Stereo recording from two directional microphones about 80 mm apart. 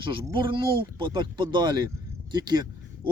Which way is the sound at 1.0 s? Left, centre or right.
Right.